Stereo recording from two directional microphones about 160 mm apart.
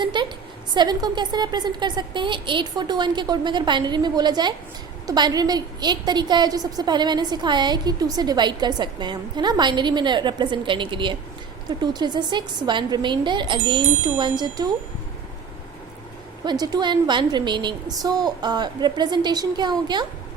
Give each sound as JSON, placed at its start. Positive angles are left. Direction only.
{"t": 0.0, "sound": "a sound", "side_deg": -30}
{"t": 0.7, "sound": "a woman's voice", "side_deg": -25}
{"t": 16.4, "sound": "a woman's voice", "side_deg": -25}